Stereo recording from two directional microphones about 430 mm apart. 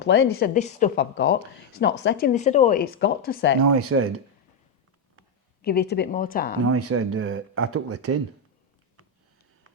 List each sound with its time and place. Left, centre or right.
0.0 s speech: left
3.6 s speech: right
5.6 s speech: left
6.7 s speech: right